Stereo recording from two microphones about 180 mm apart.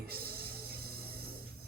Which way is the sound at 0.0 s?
60° right (ahead or behind).